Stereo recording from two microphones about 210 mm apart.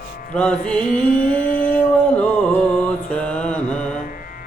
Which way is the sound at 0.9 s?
40° left (ahead or behind).